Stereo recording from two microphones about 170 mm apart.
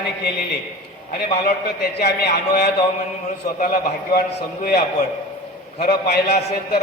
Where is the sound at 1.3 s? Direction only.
60° left (ahead or behind).